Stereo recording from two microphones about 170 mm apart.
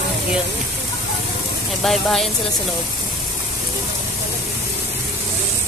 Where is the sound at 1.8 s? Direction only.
Centre (ahead or behind).